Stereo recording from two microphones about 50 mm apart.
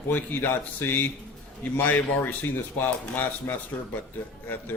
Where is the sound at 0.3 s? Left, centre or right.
Left.